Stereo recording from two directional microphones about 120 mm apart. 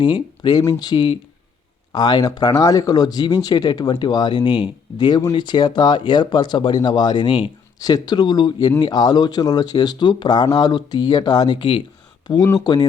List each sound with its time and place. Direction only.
0.0 s speech: 35° left (ahead or behind)
0.6 s speech: 25° left (ahead or behind)
0.9 s speech: 40° left (ahead or behind)